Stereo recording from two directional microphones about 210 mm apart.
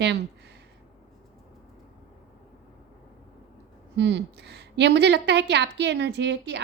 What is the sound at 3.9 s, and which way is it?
A woman's voice, 55° right (ahead or behind).